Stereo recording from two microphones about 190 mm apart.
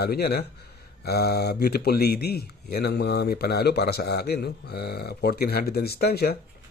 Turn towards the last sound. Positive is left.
turn(degrees=55)  # may be behind; listen again after turning